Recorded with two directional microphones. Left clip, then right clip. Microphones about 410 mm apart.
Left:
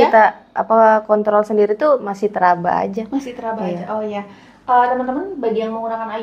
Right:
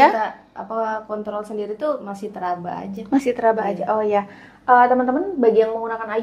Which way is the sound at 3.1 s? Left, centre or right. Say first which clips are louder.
Right 6 dB; right.